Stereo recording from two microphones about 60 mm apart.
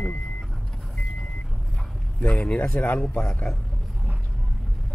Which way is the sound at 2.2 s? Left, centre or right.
Left.